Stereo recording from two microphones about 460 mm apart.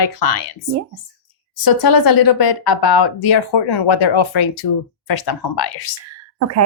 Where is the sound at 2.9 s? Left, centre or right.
Left.